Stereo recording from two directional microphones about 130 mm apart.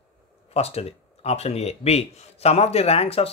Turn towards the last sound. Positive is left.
turn(degrees=50)  # may be behind; listen again after turning